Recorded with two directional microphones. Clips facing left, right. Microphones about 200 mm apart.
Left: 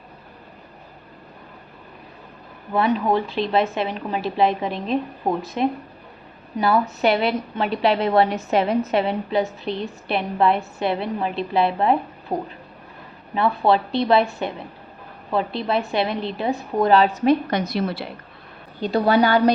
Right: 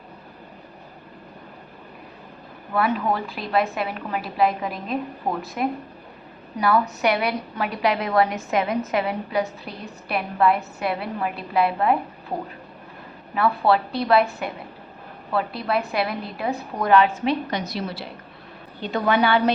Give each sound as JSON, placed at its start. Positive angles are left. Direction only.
{"t": 2.7, "sound": "a woman's voice", "side_deg": 25}
{"t": 18.8, "sound": "a woman's voice", "side_deg": 35}